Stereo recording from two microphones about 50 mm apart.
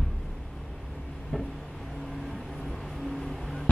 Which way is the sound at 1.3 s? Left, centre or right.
Centre.